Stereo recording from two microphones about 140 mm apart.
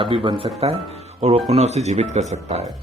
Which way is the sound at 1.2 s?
50° right (ahead or behind).